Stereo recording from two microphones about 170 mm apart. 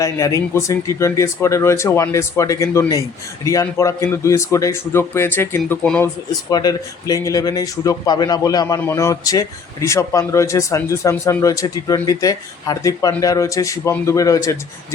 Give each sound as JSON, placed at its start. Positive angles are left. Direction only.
{"t": 0.0, "sound": "speech", "side_deg": 20}
{"t": 6.5, "sound": "speech", "side_deg": 25}